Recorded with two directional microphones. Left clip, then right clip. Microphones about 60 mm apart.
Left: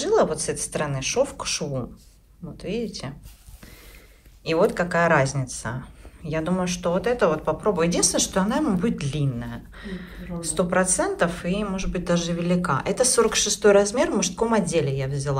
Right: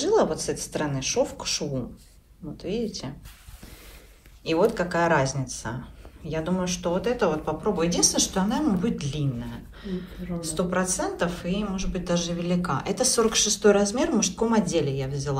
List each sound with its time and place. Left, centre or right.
0.0 s a woman's voice: right
4.5 s speech: right